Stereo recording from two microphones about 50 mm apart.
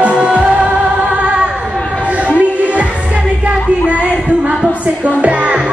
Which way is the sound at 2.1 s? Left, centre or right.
Right.